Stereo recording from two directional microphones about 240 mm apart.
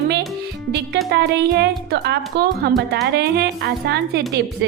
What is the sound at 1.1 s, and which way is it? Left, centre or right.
A woman's voice, right.